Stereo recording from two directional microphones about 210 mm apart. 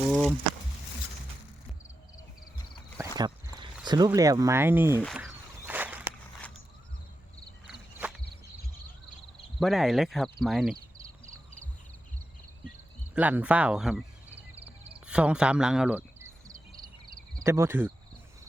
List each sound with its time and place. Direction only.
0.1 s a sound: 5° left (ahead or behind)
3.0 s a sound: 15° right (ahead or behind)
7.7 s cricket: 5° right (ahead or behind)
9.6 s speech: centre (ahead or behind)
13.1 s speech: 5° right (ahead or behind)
14.6 s a sound: 30° right (ahead or behind)
15.0 s speech: 5° right (ahead or behind)
17.1 s cricket: 40° right (ahead or behind)
17.4 s cricket: 10° right (ahead or behind)